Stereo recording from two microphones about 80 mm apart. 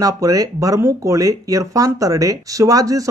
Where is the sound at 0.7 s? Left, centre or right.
Right.